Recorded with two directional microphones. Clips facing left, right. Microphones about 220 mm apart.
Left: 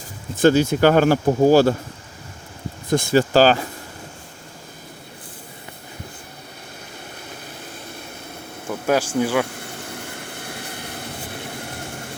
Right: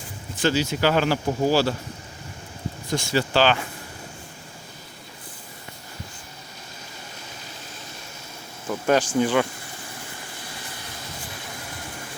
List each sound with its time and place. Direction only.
0.4 s speech: 50° left (ahead or behind)
2.9 s speech: 45° left (ahead or behind)
8.9 s speech: 10° left (ahead or behind)
9.5 s a sound: 60° left (ahead or behind)